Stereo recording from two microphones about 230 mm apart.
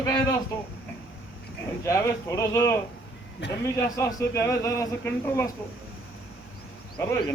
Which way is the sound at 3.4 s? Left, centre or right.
Left.